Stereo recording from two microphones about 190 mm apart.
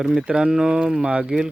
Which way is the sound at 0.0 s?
5° right (ahead or behind).